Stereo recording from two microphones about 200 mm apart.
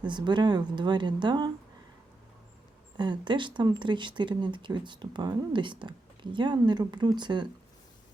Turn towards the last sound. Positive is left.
turn(degrees=-20)  # may be behind; listen again after turning